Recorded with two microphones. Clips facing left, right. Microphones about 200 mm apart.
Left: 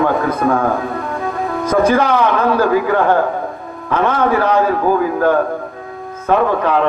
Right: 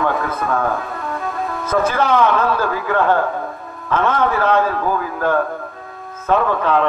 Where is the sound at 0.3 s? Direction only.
30° left (ahead or behind).